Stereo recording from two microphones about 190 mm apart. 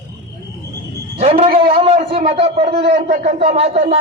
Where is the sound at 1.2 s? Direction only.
30° right (ahead or behind).